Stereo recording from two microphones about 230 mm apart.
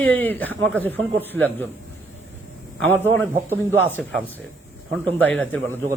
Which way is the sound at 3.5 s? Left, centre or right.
Centre.